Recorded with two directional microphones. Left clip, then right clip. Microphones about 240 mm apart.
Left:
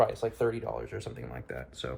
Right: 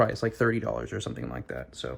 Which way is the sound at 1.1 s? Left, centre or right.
Centre.